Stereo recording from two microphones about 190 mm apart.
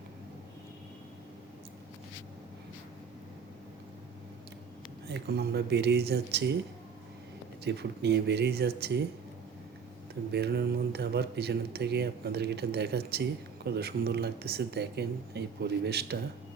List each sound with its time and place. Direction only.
5.0 s speech: 60° right (ahead or behind)
7.6 s speech: 60° right (ahead or behind)
10.3 s speech: 60° right (ahead or behind)